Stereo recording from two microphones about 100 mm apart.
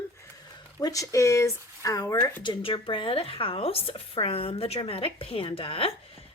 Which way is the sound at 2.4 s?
60° left (ahead or behind).